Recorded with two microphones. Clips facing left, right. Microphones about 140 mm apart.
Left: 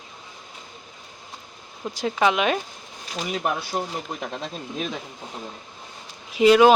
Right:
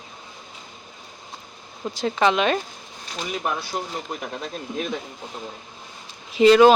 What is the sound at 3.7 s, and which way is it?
Speech, 20° left (ahead or behind).